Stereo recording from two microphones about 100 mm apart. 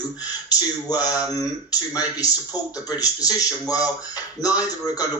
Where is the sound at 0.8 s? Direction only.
40° left (ahead or behind).